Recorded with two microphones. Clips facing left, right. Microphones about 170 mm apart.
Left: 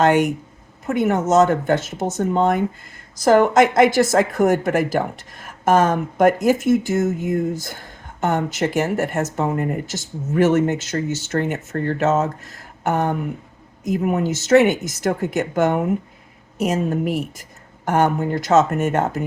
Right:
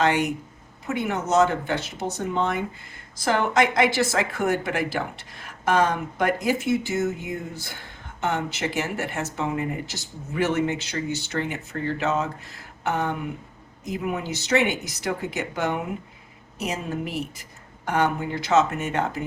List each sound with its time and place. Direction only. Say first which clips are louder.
0.0 s speech: left 6 dB; 50° left (ahead or behind)